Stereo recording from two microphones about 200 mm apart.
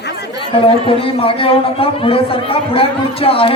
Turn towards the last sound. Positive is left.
turn(degrees=30)  # may be behind; listen again after turning